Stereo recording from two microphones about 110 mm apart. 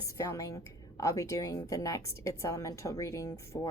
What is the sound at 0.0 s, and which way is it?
A woman's voice, 30° left (ahead or behind).